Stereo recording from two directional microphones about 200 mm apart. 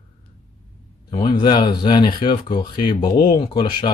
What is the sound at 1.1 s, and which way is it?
Speech, 20° left (ahead or behind).